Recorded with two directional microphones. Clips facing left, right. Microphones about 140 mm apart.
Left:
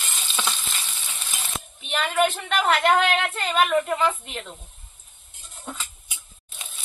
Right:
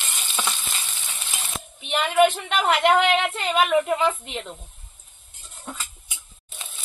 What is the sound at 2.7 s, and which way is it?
A woman's voice, 20° right (ahead or behind).